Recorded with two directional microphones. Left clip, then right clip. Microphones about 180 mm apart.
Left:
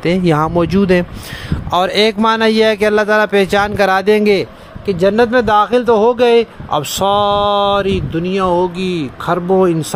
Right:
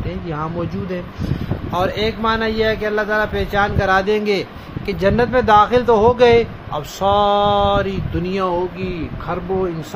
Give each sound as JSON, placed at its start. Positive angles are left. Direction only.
{"t": 0.0, "sound": "speech", "side_deg": 80}
{"t": 8.2, "sound": "speech", "side_deg": 25}
{"t": 8.7, "sound": "speech", "side_deg": 60}